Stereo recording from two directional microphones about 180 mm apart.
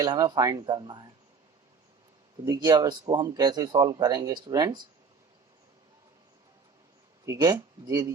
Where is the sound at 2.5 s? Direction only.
25° right (ahead or behind).